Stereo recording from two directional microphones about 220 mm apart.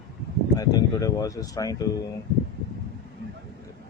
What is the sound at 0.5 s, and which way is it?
Speech, 15° left (ahead or behind).